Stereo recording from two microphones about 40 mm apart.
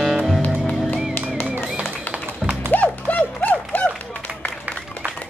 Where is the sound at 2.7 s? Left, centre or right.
Left.